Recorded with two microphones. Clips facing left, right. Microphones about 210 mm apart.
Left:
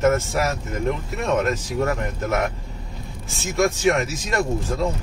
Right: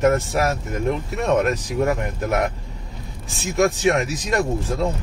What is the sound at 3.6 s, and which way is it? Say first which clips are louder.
Speech: right 1 dB; 15° right (ahead or behind).